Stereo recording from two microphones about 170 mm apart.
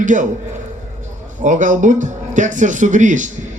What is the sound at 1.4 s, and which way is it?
Speech, 50° right (ahead or behind).